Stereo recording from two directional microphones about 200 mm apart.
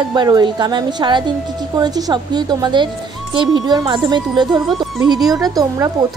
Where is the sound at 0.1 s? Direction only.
20° right (ahead or behind).